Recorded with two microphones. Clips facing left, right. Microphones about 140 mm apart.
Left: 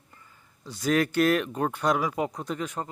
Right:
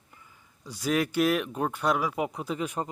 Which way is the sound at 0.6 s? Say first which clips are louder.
Left 2 dB; 10° right (ahead or behind).